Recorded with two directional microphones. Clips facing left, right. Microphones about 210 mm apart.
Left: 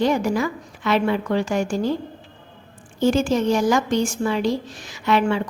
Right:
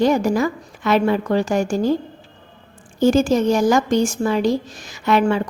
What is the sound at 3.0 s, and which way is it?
A woman's voice, 40° right (ahead or behind).